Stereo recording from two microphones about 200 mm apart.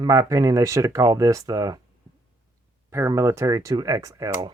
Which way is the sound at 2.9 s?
15° right (ahead or behind).